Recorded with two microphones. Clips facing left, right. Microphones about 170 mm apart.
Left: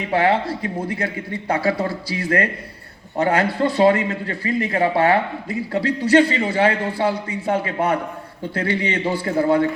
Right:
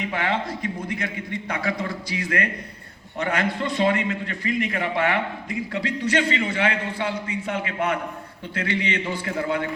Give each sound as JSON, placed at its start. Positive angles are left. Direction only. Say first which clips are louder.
{"t": 0.1, "sound": "a man's voice", "louder": "left 12 dB", "side_deg": 35}